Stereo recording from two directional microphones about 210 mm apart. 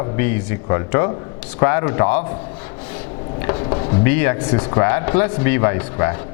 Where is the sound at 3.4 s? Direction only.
25° left (ahead or behind).